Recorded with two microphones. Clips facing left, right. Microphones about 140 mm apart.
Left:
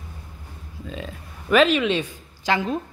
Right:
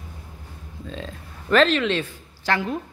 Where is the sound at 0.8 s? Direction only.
5° left (ahead or behind).